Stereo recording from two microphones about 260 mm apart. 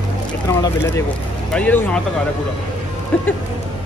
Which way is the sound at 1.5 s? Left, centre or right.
Centre.